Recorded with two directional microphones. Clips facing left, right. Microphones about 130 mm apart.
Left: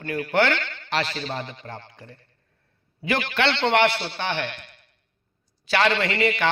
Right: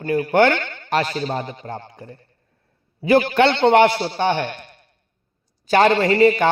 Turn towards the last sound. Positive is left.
turn(degrees=-40)  # may be behind; listen again after turning